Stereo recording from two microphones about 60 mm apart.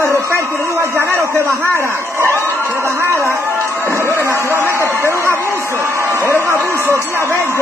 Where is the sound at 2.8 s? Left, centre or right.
Right.